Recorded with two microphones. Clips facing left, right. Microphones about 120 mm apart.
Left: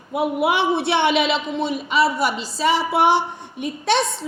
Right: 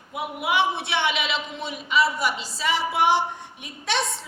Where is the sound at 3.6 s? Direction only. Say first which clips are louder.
Left 8 dB; 35° left (ahead or behind).